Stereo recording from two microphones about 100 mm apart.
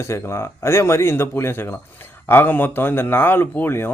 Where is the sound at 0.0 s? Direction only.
30° left (ahead or behind).